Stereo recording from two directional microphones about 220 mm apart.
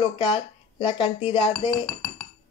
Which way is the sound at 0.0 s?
25° left (ahead or behind).